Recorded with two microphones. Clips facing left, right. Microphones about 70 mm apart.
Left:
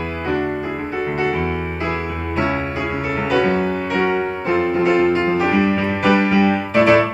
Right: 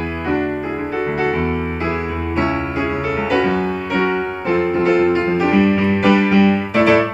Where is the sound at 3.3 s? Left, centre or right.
Centre.